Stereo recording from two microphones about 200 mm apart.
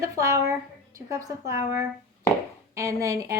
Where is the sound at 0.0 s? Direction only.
15° right (ahead or behind).